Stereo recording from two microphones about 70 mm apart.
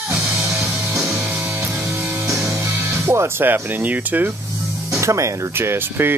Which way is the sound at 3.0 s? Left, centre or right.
Right.